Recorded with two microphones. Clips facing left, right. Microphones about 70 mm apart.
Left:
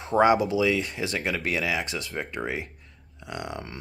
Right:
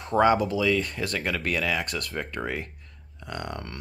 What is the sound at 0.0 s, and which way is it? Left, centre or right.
Speech, centre.